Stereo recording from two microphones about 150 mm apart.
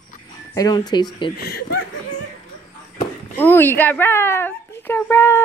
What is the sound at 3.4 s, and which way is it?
A woman's voice, 15° left (ahead or behind).